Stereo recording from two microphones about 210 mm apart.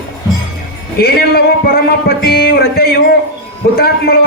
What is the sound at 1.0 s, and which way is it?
Speech, 45° left (ahead or behind).